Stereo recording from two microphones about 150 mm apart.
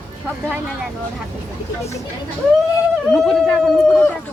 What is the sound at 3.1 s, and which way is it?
Speech, 5° left (ahead or behind).